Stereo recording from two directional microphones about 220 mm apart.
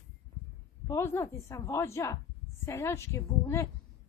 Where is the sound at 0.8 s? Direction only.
15° left (ahead or behind).